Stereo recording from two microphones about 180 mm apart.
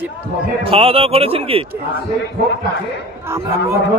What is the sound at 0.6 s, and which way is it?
Speech, 35° right (ahead or behind).